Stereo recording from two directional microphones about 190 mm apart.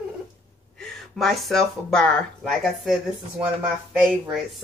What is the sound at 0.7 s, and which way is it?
Speech, centre (ahead or behind).